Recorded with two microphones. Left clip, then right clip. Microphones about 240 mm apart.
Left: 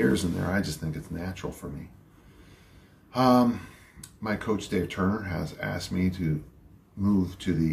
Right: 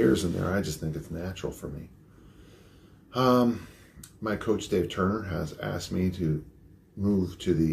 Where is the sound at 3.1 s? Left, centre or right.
Centre.